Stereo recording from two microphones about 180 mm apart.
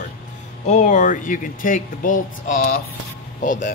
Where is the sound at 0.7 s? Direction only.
40° left (ahead or behind).